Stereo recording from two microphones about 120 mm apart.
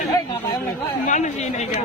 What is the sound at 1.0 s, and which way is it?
Speech, 80° left.